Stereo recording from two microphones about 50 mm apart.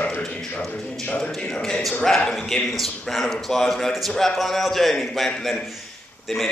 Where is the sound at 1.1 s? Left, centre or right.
Centre.